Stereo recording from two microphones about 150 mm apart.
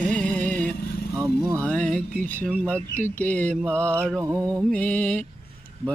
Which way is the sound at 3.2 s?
10° left (ahead or behind).